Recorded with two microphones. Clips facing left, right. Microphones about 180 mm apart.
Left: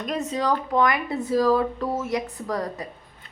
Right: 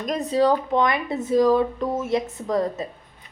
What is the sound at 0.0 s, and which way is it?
Speech, 40° right (ahead or behind).